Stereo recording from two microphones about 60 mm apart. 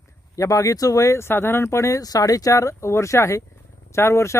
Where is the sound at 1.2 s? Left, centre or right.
Left.